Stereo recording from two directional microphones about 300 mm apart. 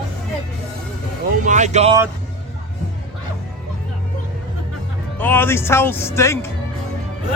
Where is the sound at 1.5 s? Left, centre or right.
Right.